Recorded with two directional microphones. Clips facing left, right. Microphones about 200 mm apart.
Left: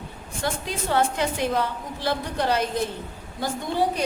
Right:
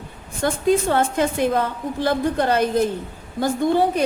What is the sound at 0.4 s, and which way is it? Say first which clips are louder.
A woman's voice: right 10 dB; 50° right (ahead or behind).